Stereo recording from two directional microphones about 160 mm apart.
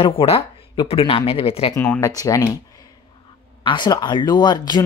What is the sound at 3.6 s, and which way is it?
Speech, 30° left (ahead or behind).